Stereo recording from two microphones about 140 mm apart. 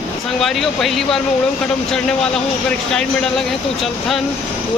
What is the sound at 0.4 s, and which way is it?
Speech, centre (ahead or behind).